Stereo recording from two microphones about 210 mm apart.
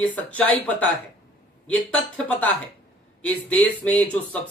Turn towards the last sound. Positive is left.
turn(degrees=5)  # may be behind; listen again after turning